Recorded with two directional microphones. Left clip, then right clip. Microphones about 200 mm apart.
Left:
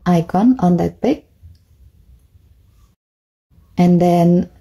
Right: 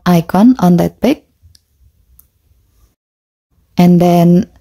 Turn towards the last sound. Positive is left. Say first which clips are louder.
# right 3 dB
turn(degrees=-30)  # may be behind; listen again after turning